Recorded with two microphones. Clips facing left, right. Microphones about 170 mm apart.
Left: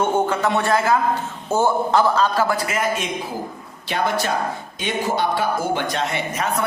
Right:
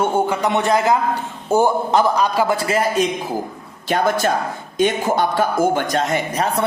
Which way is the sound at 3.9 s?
45° right (ahead or behind).